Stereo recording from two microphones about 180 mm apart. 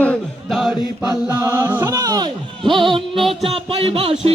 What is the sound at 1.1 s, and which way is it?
A capella, 15° right (ahead or behind).